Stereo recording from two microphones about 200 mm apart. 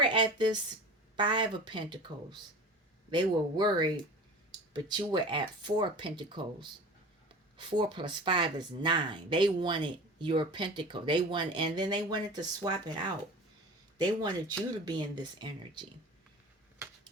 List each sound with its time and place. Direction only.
0.0 s a woman's voice: 25° right (ahead or behind)
14.0 s speech: 20° right (ahead or behind)